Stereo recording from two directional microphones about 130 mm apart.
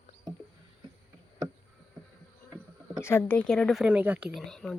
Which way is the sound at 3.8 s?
10° right (ahead or behind).